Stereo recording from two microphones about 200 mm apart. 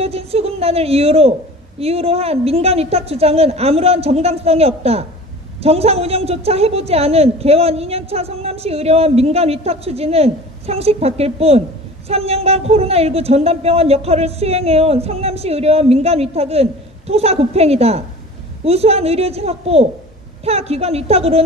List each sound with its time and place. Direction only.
0.0 s a woman's voice: 30° right (ahead or behind)